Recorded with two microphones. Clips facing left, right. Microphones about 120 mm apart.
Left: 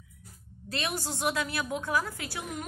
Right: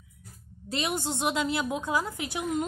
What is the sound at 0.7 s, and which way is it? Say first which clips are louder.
A woman's voice: right 4 dB; 25° right (ahead or behind).